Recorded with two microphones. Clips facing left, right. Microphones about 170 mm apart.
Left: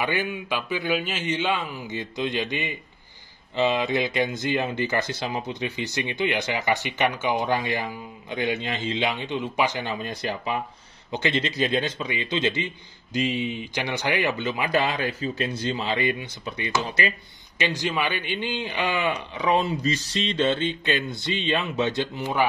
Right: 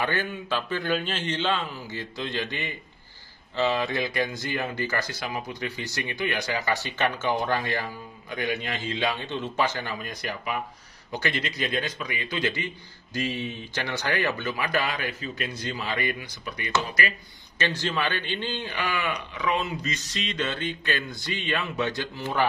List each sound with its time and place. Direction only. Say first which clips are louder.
0.0 s a man's voice: left 2 dB; 10° left (ahead or behind)
17.6 s speech: left 2 dB; 15° left (ahead or behind)